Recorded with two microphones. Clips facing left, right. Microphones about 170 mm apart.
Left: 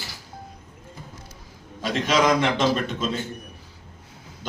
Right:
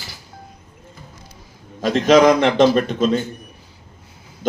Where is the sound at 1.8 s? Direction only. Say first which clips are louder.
Right 9 dB; 45° right (ahead or behind).